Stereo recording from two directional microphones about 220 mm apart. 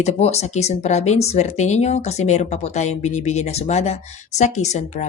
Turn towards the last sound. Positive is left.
turn(degrees=30)  # may be behind; listen again after turning